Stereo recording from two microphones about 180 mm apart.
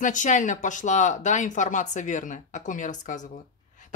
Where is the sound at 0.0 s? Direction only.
45° left (ahead or behind).